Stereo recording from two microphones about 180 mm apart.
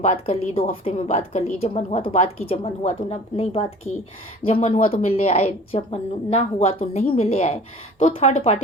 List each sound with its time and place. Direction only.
0.0 s a woman's voice: 35° left (ahead or behind)